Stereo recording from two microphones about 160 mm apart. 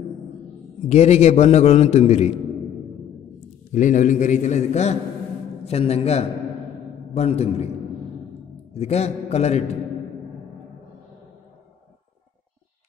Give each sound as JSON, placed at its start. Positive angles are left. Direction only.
{"t": 0.8, "sound": "a man's voice", "side_deg": 45}
{"t": 3.7, "sound": "a man's voice", "side_deg": 50}
{"t": 8.7, "sound": "a man's voice", "side_deg": 40}